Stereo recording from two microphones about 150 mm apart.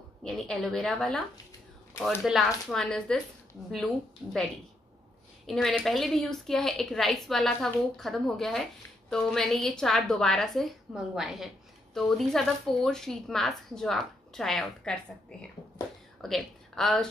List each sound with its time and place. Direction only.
0.2 s a woman's voice: centre (ahead or behind)
2.2 s a woman's voice: centre (ahead or behind)
5.5 s a woman's voice: 5° left (ahead or behind)
16.2 s speech: centre (ahead or behind)